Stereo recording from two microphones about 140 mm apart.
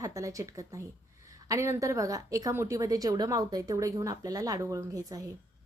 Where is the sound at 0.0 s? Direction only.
25° right (ahead or behind).